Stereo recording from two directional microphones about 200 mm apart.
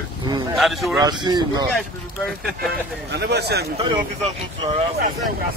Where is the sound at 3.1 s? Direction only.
55° right (ahead or behind).